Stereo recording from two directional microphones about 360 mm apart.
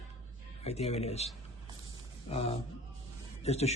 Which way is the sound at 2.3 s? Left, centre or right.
Centre.